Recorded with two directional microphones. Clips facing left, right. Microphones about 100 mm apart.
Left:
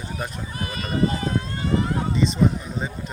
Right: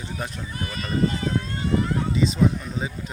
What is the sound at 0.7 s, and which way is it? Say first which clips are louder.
Speech: left 1 dB; 40° left (ahead or behind).